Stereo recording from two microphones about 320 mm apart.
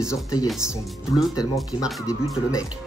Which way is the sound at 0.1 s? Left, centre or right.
Centre.